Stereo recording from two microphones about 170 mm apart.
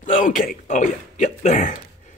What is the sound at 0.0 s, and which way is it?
Speech, 50° left (ahead or behind).